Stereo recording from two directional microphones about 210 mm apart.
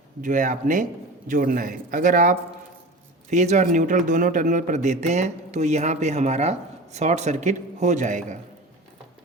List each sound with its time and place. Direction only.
0.2 s a man's voice: 40° right (ahead or behind)